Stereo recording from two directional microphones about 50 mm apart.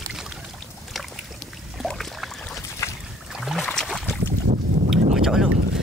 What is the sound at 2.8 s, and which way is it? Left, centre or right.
Boat, left.